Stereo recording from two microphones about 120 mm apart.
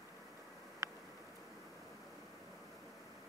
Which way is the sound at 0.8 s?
25° right (ahead or behind).